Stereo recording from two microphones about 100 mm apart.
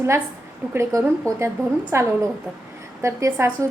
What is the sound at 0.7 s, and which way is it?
A woman's voice, 25° right (ahead or behind).